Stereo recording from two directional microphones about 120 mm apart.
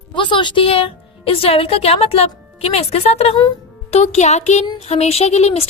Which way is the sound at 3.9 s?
70° left (ahead or behind).